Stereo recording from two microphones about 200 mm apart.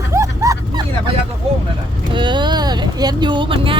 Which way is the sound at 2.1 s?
25° right (ahead or behind).